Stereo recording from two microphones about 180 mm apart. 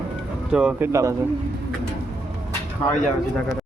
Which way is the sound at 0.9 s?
15° right (ahead or behind).